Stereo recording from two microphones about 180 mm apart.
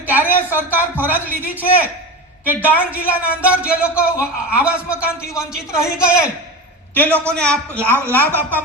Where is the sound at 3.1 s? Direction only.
10° right (ahead or behind).